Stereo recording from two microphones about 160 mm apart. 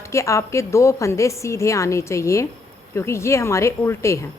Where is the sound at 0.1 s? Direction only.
20° left (ahead or behind).